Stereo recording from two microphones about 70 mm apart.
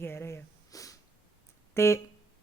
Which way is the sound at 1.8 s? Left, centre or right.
Left.